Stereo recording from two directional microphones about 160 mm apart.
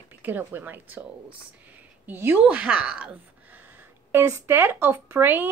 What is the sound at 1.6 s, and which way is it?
Speech, 15° right (ahead or behind).